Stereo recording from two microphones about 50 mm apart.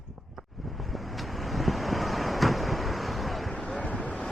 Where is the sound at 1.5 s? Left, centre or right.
Centre.